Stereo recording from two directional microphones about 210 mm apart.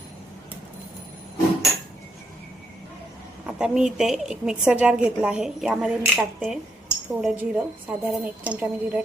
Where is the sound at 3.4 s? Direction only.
5° right (ahead or behind).